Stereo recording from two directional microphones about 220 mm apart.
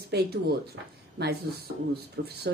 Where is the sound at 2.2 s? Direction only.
50° right (ahead or behind).